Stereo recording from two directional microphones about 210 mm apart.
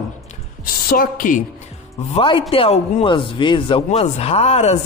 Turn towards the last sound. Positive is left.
turn(degrees=30)  # may be behind; listen again after turning